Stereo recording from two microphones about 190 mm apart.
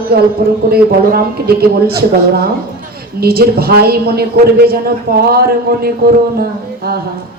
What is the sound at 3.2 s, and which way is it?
Speech, 55° right (ahead or behind).